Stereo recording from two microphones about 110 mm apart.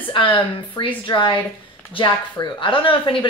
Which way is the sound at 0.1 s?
45° left (ahead or behind).